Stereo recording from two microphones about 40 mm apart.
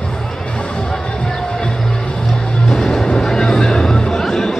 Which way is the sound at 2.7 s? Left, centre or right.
Centre.